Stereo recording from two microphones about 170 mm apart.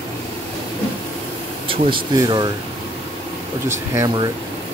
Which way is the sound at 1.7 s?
30° right (ahead or behind).